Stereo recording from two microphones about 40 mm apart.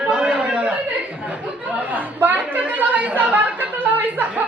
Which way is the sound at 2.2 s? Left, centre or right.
Right.